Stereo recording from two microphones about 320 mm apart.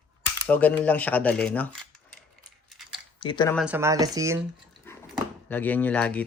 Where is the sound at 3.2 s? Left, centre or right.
Centre.